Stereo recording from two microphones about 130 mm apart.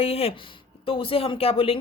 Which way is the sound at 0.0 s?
50° left (ahead or behind).